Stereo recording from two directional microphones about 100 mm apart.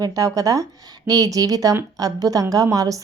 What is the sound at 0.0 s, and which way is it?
A woman's voice, 35° right (ahead or behind).